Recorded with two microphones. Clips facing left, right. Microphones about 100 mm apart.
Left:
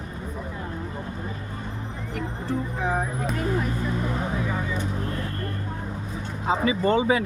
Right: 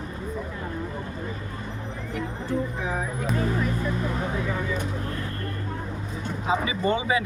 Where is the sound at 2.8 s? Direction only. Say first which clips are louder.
Left 3 dB; 50° left (ahead or behind).